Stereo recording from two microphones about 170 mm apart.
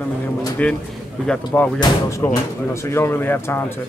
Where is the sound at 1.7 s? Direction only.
20° left (ahead or behind).